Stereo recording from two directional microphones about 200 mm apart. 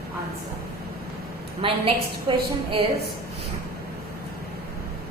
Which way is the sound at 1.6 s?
25° right (ahead or behind).